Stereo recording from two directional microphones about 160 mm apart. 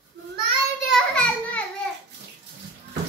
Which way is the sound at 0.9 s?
5° left (ahead or behind).